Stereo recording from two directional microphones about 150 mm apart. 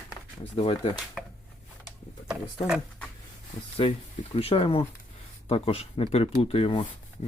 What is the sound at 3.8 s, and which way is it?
Speech, 35° left (ahead or behind).